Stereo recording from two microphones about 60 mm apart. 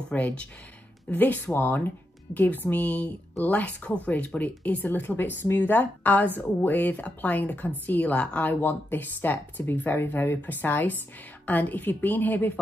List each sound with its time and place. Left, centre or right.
0.1 s a woman's voice: left